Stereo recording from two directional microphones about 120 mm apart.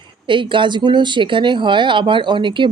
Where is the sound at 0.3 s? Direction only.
45° right (ahead or behind).